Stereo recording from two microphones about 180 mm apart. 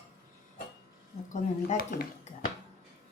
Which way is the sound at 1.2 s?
50° left (ahead or behind).